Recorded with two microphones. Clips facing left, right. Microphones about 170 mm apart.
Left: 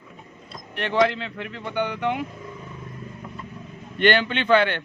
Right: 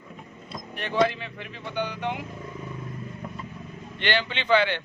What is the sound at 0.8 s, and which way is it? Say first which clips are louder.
A man's voice: left 3 dB; 65° left (ahead or behind).